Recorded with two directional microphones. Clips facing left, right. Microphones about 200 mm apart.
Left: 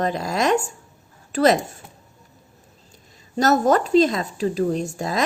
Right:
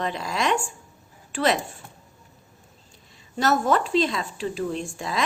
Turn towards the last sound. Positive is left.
turn(degrees=40)  # may be behind; listen again after turning